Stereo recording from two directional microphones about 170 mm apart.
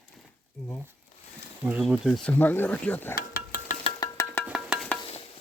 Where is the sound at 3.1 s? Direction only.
60° left (ahead or behind).